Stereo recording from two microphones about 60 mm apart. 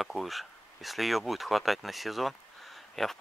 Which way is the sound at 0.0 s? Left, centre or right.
Centre.